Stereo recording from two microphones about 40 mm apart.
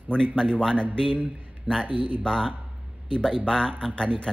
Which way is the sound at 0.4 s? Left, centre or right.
Centre.